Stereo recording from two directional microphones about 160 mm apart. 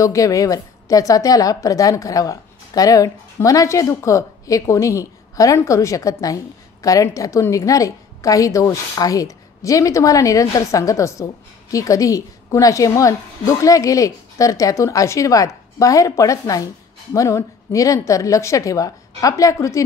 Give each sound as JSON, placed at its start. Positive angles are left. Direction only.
{"t": 0.0, "sound": "a woman's voice", "side_deg": 20}